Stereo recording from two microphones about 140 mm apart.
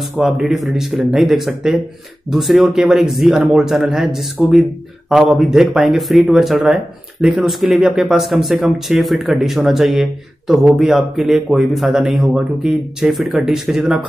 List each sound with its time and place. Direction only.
0.2 s speech: centre (ahead or behind)